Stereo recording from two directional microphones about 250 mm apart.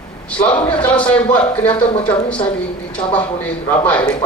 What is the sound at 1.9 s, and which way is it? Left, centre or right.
Speech, left.